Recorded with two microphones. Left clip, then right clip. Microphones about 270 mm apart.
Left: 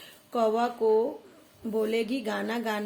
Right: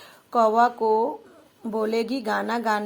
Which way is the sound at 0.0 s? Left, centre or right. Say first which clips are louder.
Right 6 dB; centre.